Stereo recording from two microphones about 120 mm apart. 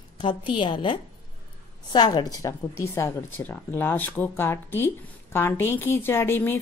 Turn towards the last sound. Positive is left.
turn(degrees=20)  # may be behind; listen again after turning